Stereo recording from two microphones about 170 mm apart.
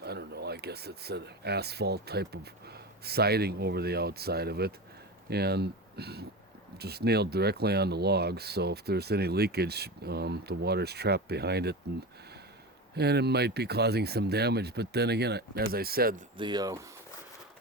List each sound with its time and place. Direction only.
0.0 s speech: 75° right (ahead or behind)
13.0 s speech: 70° right (ahead or behind)
16.4 s speech: 25° right (ahead or behind)